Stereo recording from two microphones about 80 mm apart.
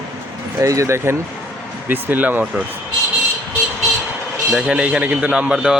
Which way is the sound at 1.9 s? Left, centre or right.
Right.